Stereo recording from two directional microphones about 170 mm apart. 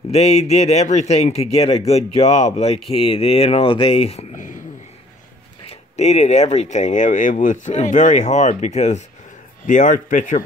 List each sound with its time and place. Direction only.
0.1 s speech: 40° left (ahead or behind)
5.7 s speech: 40° left (ahead or behind)